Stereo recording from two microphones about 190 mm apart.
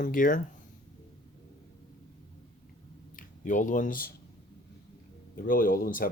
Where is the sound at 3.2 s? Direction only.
40° left (ahead or behind).